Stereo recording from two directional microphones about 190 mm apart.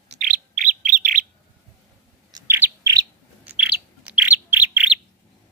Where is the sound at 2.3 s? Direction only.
10° right (ahead or behind).